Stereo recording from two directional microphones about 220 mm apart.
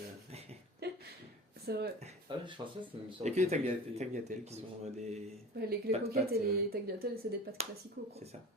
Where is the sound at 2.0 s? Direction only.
25° right (ahead or behind).